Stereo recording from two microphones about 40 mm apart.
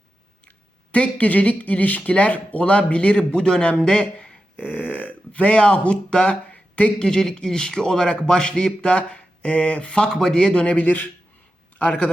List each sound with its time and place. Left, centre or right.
0.4 s speech: left
4.5 s speech: left
6.5 s a sound: left
7.0 s speech: centre; by 10.8 s left
10.8 s speech: left
11.8 s speech: left